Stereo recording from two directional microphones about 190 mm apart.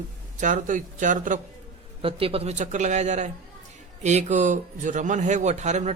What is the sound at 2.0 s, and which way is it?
Speech, 30° right (ahead or behind).